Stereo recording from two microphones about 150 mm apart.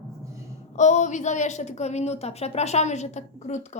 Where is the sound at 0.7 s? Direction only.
55° left (ahead or behind).